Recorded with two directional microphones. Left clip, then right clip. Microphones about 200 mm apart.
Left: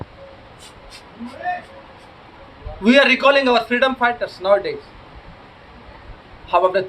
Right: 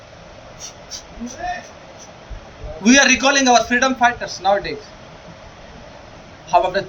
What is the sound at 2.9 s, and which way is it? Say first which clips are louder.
A man's voice: even; 25° left (ahead or behind).